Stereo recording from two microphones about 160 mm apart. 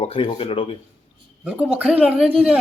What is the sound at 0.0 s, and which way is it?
Speech, 35° left (ahead or behind).